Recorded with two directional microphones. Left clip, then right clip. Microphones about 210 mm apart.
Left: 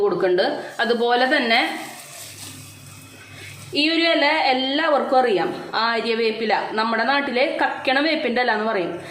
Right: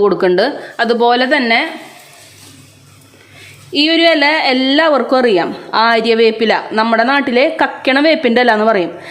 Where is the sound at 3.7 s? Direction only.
50° right (ahead or behind).